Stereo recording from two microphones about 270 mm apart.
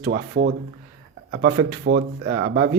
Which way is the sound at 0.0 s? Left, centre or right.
Right.